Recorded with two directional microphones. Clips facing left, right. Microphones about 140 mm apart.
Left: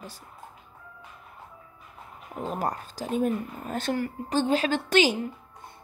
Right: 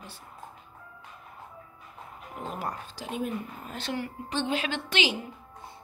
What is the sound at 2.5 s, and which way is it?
Speech, 40° left (ahead or behind).